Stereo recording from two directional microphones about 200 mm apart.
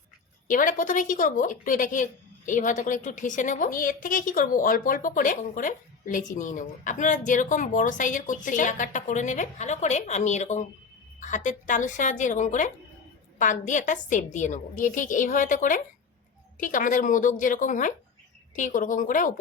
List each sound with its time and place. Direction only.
0.4 s a woman's voice: 40° left (ahead or behind)